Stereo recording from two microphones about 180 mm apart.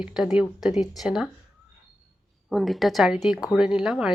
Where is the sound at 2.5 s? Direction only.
Centre (ahead or behind).